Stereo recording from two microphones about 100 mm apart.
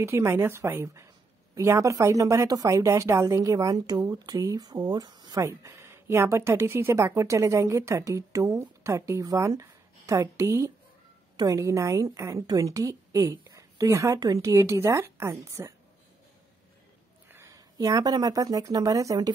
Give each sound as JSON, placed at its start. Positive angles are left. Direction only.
{"t": 0.0, "sound": "speech", "side_deg": -25}
{"t": 5.4, "sound": "speech", "side_deg": -30}
{"t": 17.3, "sound": "a sound", "side_deg": -25}
{"t": 17.7, "sound": "speech", "side_deg": -40}